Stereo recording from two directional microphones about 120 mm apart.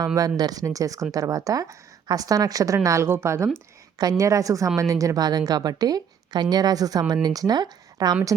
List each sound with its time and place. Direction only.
0.0 s a woman's voice: 30° right (ahead or behind)